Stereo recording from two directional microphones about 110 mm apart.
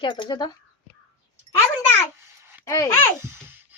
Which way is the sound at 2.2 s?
20° right (ahead or behind).